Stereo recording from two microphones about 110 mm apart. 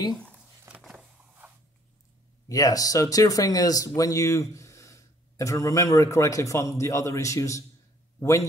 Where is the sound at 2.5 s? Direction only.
35° left (ahead or behind).